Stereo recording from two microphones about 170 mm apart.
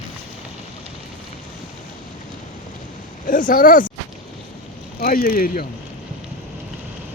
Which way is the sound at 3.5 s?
55° left (ahead or behind).